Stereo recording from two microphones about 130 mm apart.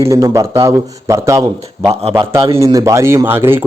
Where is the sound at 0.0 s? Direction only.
25° right (ahead or behind).